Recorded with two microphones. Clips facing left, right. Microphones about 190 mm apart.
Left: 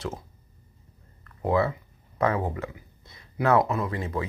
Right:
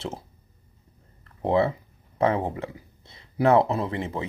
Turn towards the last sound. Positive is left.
turn(degrees=-25)  # may be behind; listen again after turning